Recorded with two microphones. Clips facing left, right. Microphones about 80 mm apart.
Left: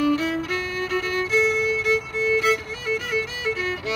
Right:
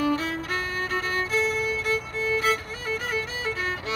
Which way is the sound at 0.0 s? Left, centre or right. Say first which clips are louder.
Left 4 dB; right.